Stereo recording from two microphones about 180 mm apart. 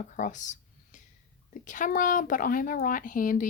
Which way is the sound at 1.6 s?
45° left (ahead or behind).